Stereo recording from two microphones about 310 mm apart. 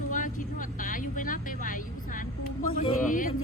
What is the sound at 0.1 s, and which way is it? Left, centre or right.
Vehicle, left.